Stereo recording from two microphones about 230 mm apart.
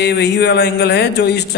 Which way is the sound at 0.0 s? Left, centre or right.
Left.